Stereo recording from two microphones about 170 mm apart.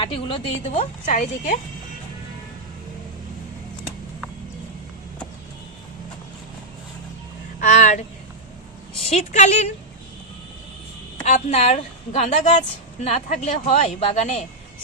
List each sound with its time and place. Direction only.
0.0 s a woman's voice: 30° left (ahead or behind)
7.6 s a sound: 45° left (ahead or behind)
9.0 s a woman's voice: 40° left (ahead or behind)
11.3 s a woman's voice: 40° left (ahead or behind)